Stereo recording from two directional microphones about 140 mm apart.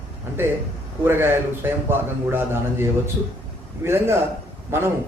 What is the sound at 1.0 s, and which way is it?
A man's voice, 15° right (ahead or behind).